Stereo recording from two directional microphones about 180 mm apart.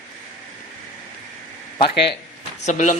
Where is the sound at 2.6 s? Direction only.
45° left (ahead or behind).